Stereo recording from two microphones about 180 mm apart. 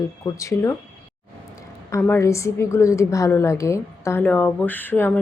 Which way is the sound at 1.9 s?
15° left (ahead or behind).